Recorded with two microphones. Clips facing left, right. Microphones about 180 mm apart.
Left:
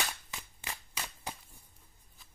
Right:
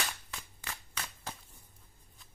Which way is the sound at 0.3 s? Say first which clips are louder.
Left 1 dB; 15° left (ahead or behind).